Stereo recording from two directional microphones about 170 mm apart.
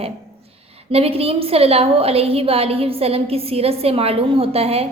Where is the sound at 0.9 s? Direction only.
35° right (ahead or behind).